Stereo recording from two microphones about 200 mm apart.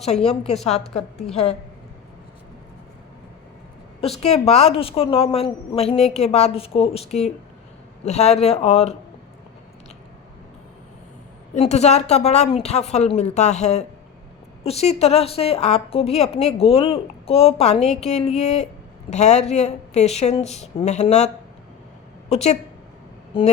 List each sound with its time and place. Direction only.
0.3 s a woman's voice: 35° left (ahead or behind)
4.2 s a woman's voice: 35° left (ahead or behind)
11.5 s a woman's voice: 35° left (ahead or behind)
22.3 s a woman's voice: 35° left (ahead or behind)